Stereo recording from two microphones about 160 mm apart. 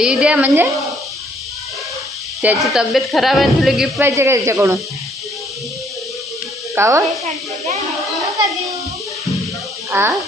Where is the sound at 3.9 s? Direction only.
15° right (ahead or behind).